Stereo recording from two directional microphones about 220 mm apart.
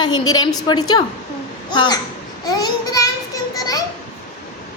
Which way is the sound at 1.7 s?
20° left (ahead or behind).